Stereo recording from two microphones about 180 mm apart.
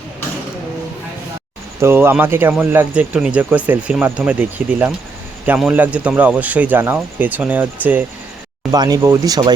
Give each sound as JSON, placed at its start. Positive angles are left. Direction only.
{"t": 1.8, "sound": "speech", "side_deg": -15}
{"t": 8.7, "sound": "speech", "side_deg": -20}